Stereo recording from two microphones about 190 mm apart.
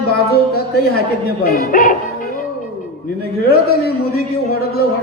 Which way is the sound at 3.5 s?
55° left (ahead or behind).